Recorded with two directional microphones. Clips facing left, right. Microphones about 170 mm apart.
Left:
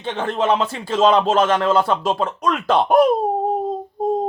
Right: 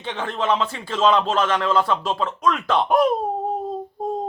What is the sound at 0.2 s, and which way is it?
Speech, 40° left (ahead or behind).